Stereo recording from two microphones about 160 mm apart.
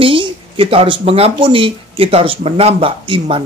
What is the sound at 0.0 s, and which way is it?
Speech, 35° right (ahead or behind).